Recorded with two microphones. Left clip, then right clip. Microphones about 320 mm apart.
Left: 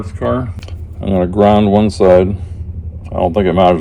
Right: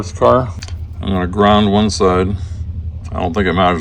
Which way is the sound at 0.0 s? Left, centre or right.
Centre.